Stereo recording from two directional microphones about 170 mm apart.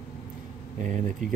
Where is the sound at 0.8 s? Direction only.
50° right (ahead or behind).